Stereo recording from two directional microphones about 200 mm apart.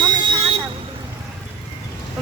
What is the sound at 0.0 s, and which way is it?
Vehicle, 20° right (ahead or behind).